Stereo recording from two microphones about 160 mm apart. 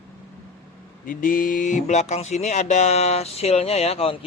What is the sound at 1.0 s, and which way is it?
Speech, 60° left (ahead or behind).